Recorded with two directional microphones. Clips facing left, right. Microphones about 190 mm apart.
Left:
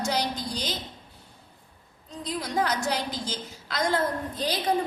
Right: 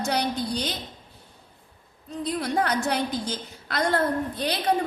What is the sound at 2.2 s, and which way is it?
A woman's voice, 60° right (ahead or behind).